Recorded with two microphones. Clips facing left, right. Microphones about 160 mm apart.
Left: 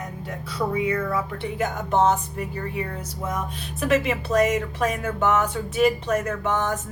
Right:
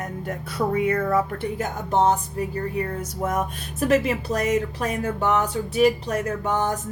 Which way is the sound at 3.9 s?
40° right (ahead or behind).